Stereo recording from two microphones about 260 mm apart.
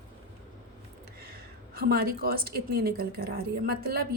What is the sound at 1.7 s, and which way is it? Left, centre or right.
Speech, right.